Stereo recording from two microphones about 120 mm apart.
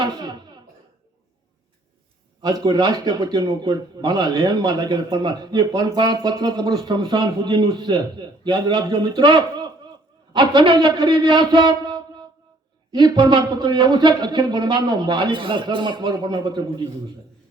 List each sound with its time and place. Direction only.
0.0 s speech: 40° right (ahead or behind)
2.4 s a man's voice: 35° right (ahead or behind)